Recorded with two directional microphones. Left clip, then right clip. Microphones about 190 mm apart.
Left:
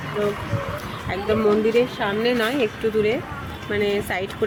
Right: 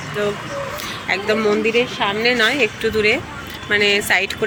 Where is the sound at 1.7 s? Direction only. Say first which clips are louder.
Right 2 dB; 25° left (ahead or behind).